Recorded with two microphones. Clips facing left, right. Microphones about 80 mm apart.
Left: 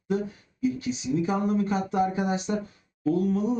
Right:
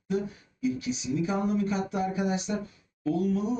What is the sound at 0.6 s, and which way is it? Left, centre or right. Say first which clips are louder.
Speech: left 2 dB; left.